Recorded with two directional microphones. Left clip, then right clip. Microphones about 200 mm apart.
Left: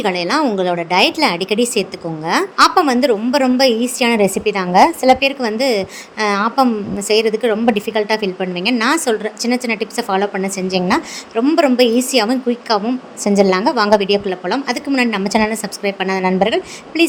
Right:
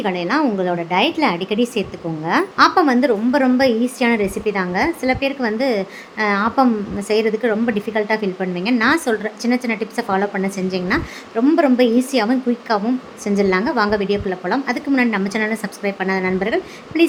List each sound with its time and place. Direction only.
0.0 s a woman's voice: 25° left (ahead or behind)